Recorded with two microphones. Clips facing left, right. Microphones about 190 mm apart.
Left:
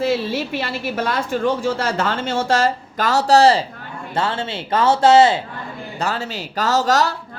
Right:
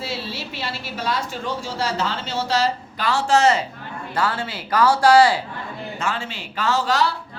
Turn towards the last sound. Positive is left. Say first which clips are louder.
# left 3 dB
turn(degrees=45)  # may be behind; listen again after turning